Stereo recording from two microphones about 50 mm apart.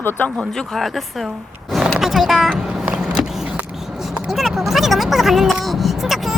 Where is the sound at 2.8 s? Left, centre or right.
Centre.